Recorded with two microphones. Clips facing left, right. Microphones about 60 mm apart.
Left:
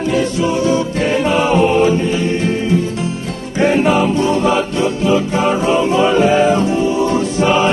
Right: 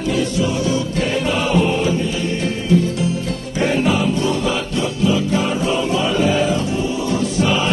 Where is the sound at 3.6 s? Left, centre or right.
Left.